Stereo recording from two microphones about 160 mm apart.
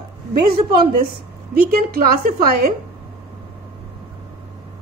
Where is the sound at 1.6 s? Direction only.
65° right (ahead or behind).